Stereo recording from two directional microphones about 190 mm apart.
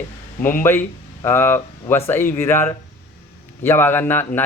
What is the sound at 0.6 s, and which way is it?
Speech, 10° left (ahead or behind).